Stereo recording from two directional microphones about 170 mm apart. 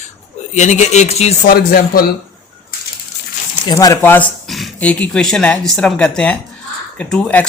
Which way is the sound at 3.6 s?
20° left (ahead or behind).